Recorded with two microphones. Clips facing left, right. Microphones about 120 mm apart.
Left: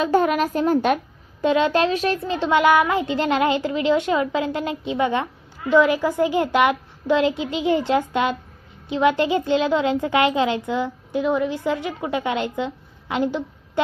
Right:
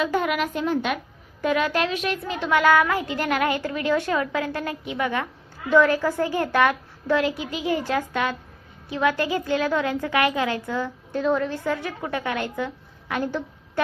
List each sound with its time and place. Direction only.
0.0 s a woman's voice: 35° left (ahead or behind)
1.4 s a child's voice: 25° left (ahead or behind)